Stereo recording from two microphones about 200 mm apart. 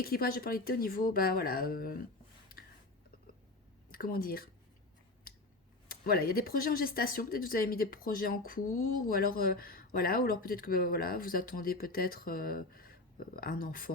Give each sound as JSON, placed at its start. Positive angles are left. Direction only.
{"t": 0.0, "sound": "speech", "side_deg": 50}
{"t": 3.9, "sound": "speech", "side_deg": 45}
{"t": 5.9, "sound": "speech", "side_deg": 50}